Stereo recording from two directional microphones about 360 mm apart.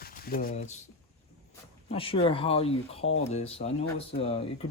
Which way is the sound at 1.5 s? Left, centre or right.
Centre.